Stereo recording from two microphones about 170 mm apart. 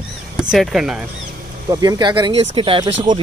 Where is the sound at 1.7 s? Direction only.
20° right (ahead or behind).